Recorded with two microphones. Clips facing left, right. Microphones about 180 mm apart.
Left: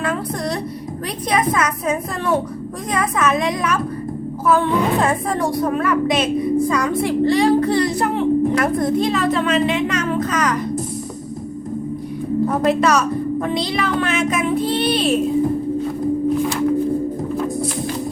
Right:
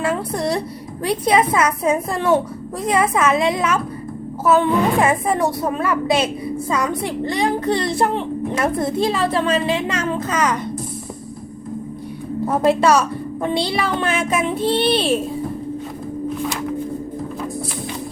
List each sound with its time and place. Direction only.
0.0 s a sound: 25° right (ahead or behind)
1.0 s a child's voice: 25° right (ahead or behind)
12.5 s a child's voice: 30° right (ahead or behind)